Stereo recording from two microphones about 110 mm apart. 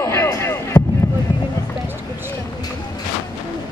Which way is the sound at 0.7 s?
45° left (ahead or behind).